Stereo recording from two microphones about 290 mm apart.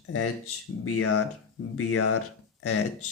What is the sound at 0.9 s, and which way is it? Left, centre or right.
Speech, left.